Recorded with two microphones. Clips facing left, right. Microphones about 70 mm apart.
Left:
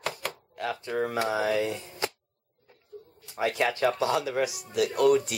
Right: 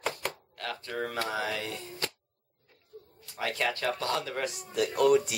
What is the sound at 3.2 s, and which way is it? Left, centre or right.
Speech, centre.